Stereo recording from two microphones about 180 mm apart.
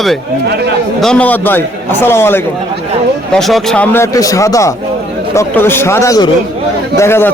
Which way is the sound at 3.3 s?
Centre (ahead or behind).